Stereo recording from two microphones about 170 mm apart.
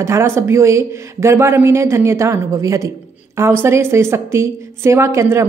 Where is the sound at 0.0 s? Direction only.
15° right (ahead or behind).